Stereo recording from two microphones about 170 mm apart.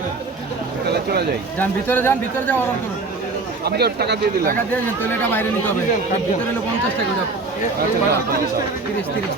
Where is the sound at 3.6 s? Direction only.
70° right (ahead or behind).